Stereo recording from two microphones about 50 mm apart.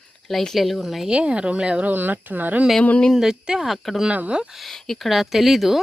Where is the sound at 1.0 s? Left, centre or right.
Right.